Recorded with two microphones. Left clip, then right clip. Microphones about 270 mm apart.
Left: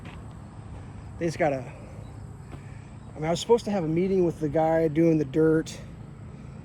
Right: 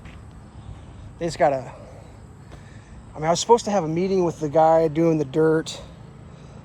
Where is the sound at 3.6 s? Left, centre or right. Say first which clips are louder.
Right 4 dB; centre.